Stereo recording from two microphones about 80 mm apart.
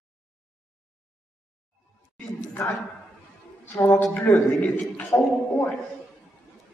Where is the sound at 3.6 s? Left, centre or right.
Left.